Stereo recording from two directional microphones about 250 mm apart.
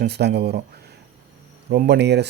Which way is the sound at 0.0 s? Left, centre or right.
Right.